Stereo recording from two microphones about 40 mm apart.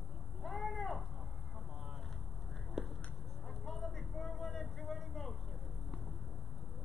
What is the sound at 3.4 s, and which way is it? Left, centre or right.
Vehicle, centre.